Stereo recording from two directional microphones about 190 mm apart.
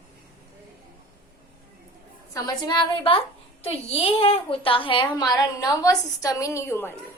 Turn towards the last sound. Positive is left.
turn(degrees=10)  # may be behind; listen again after turning